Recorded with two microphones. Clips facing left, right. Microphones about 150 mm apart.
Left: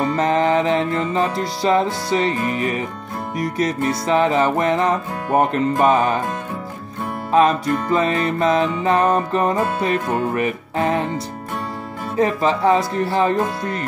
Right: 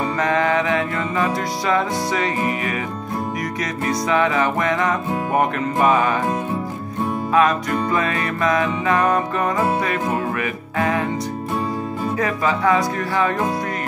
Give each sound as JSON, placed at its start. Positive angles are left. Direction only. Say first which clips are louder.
{"t": 0.1, "sound": "music", "louder": "left 1 dB", "side_deg": 30}
{"t": 4.1, "sound": "music", "louder": "left 3 dB", "side_deg": 30}
{"t": 7.3, "sound": "music", "louder": "left 3 dB", "side_deg": 30}
{"t": 12.2, "sound": "music", "louder": "left 5 dB", "side_deg": 30}